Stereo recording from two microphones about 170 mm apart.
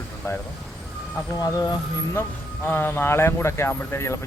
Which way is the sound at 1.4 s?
25° left (ahead or behind).